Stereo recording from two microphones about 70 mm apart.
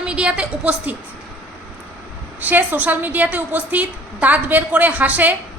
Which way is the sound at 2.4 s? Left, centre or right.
Right.